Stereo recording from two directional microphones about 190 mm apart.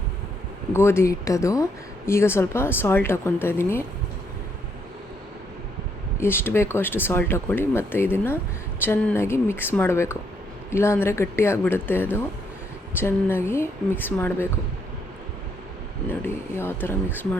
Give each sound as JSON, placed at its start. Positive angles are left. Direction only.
{"t": 0.7, "sound": "speech", "side_deg": 15}
{"t": 6.1, "sound": "speech", "side_deg": 10}
{"t": 16.0, "sound": "speech", "side_deg": 10}